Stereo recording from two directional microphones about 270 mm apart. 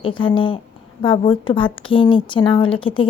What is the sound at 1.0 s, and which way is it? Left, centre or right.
A woman's voice, centre.